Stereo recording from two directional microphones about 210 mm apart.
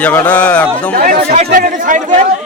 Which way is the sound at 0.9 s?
45° right (ahead or behind).